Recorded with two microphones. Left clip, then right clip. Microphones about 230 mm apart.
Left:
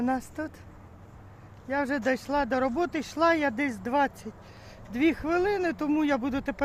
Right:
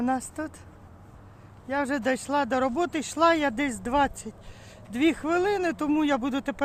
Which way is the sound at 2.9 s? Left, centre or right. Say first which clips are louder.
Right 4 dB; centre.